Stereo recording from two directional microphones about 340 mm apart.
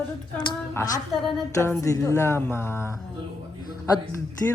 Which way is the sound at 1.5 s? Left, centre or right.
Centre.